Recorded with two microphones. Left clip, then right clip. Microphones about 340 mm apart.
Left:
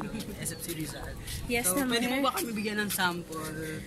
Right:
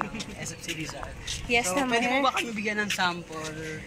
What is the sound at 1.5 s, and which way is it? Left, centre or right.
Speech, centre.